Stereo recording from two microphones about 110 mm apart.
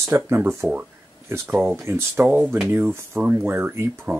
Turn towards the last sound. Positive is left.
turn(degrees=-20)  # may be behind; listen again after turning